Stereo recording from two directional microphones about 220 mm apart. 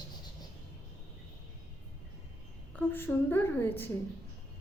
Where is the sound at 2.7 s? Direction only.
10° left (ahead or behind).